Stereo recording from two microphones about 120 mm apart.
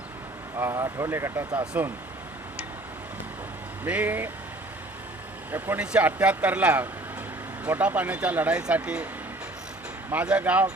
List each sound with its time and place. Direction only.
0.5 s speech: 25° right (ahead or behind)
3.8 s speech: 10° right (ahead or behind)
5.5 s speech: 15° right (ahead or behind)
10.1 s speech: 10° right (ahead or behind)